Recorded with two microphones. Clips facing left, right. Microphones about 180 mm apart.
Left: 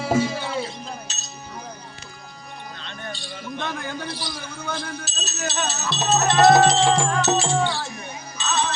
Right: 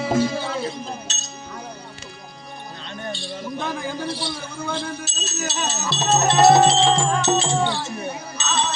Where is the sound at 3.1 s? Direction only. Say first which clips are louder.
Right 3 dB; 5° right (ahead or behind).